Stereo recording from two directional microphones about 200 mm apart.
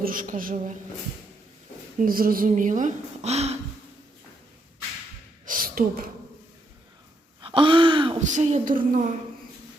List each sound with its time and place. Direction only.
0.0 s speech: 40° right (ahead or behind)
2.0 s speech: 45° right (ahead or behind)
5.5 s gasp: 45° right (ahead or behind)
7.4 s gasp: 25° right (ahead or behind)
8.3 s speech: 35° right (ahead or behind)